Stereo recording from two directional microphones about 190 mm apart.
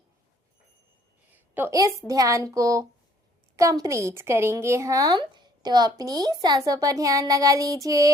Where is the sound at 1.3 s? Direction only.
10° right (ahead or behind).